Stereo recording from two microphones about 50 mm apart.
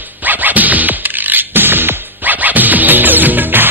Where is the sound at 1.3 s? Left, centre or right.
Right.